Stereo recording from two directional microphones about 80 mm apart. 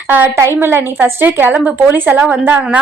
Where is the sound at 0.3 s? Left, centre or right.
Right.